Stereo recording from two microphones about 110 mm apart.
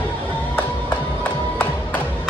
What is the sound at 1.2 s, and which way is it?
Music, 15° left (ahead or behind).